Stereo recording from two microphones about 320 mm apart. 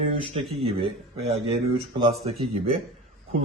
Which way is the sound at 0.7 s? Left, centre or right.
Centre.